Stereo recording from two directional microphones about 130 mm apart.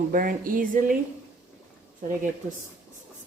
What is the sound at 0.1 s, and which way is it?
Speech, 90° right.